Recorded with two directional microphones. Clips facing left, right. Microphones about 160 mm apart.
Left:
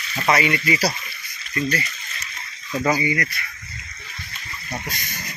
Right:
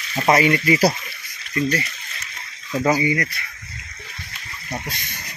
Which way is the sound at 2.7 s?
15° right (ahead or behind).